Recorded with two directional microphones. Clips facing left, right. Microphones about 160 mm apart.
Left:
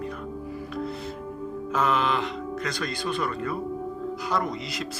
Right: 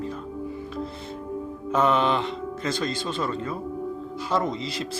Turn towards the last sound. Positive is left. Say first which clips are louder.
# right 3 dB
turn(degrees=-30)  # may be behind; listen again after turning